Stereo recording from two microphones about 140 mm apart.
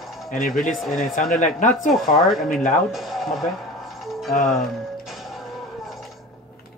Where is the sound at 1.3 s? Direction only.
65° left (ahead or behind).